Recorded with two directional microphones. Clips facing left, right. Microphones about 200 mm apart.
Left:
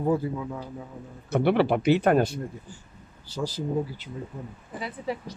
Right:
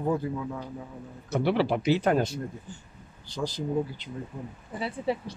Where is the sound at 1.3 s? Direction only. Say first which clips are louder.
Left 3 dB; 55° left (ahead or behind).